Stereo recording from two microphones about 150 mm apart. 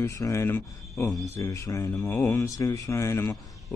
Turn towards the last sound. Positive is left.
turn(degrees=15)  # may be behind; listen again after turning